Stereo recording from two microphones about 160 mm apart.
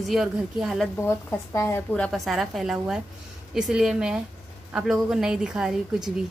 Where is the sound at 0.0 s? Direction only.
Centre (ahead or behind).